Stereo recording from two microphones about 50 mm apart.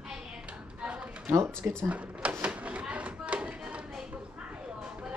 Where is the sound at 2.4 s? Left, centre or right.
Right.